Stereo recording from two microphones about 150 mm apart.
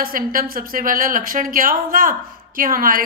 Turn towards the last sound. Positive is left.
turn(degrees=-70)  # may be behind; listen again after turning